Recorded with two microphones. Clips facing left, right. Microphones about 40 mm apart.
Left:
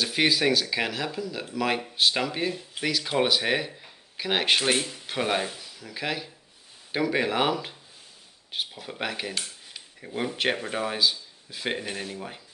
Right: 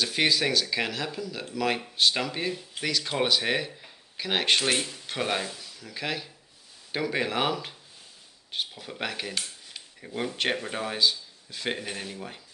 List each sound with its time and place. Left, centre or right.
0.0 s speech: centre
5.4 s speech: centre
5.8 s speech: centre